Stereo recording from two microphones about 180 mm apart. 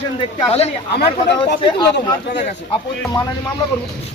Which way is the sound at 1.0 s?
65° left (ahead or behind).